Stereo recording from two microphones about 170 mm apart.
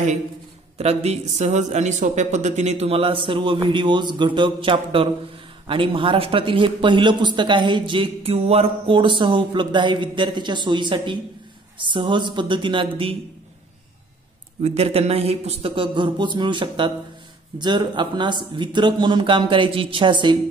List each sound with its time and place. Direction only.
0.7 s speech: 40° right (ahead or behind)
14.6 s speech: 40° right (ahead or behind)